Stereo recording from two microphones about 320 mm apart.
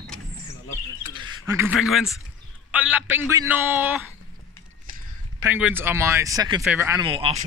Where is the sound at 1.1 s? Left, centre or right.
Centre.